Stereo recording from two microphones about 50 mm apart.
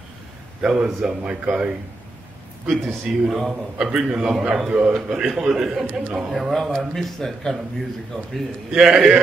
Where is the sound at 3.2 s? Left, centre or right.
Centre.